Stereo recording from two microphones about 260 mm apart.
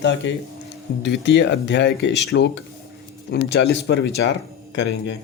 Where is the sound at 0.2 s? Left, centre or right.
Left.